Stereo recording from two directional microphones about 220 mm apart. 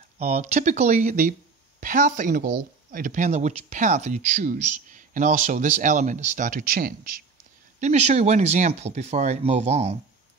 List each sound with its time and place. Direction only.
0.2 s speech: 30° right (ahead or behind)
7.8 s speech: 30° right (ahead or behind)